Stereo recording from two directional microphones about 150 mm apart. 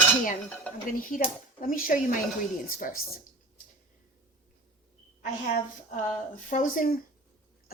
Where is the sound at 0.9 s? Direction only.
65° left (ahead or behind).